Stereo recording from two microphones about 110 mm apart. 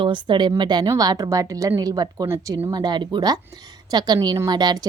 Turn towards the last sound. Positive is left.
turn(degrees=-40)  # may be behind; listen again after turning